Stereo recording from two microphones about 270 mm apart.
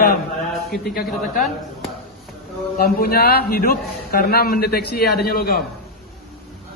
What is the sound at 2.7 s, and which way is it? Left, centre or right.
A man's voice, left.